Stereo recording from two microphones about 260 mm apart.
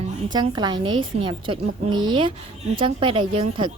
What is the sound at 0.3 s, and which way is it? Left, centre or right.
A woman's voice, centre.